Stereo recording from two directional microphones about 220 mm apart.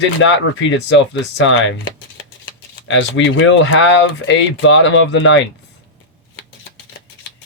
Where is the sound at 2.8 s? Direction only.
60° left (ahead or behind).